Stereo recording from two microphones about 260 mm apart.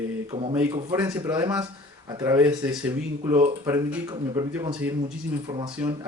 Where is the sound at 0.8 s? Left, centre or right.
Centre.